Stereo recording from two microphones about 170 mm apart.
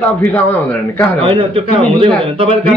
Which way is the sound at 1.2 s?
30° right (ahead or behind).